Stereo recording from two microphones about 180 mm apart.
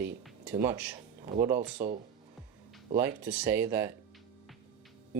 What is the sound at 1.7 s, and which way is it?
Speech, 45° right (ahead or behind).